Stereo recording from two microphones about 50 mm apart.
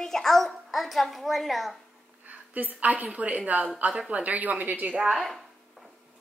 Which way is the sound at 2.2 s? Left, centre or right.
Right.